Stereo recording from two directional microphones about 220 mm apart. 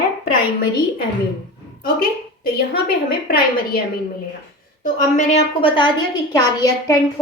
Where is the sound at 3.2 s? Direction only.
40° left (ahead or behind).